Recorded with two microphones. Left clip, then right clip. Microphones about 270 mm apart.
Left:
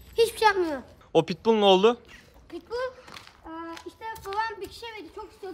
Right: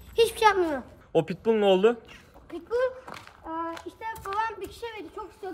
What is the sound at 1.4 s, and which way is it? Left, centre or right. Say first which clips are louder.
Speech: left 2 dB; centre.